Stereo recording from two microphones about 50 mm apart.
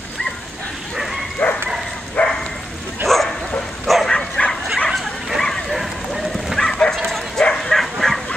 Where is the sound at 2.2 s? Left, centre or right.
Left.